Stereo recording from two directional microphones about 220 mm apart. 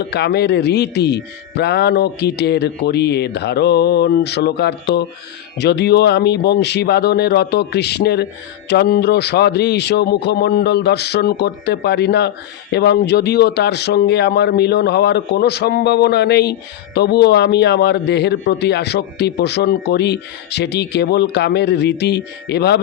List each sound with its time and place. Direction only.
0.0 s speech: 50° left (ahead or behind)